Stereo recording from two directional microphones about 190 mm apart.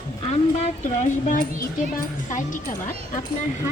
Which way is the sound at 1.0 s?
45° left (ahead or behind).